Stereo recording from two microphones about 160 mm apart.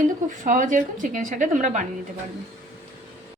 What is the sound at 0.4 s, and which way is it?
A woman's voice, 55° right (ahead or behind).